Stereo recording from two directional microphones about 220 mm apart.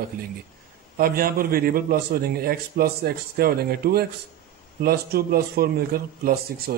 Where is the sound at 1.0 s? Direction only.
40° right (ahead or behind).